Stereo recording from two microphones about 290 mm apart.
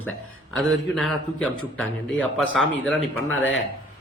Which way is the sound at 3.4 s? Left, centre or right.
Left.